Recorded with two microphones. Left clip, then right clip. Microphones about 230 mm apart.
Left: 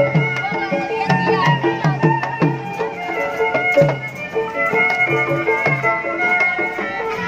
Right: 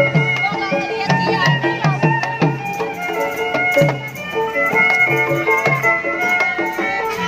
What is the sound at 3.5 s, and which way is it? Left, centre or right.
Music, right.